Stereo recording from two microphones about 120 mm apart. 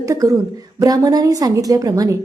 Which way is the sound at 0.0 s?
30° right (ahead or behind).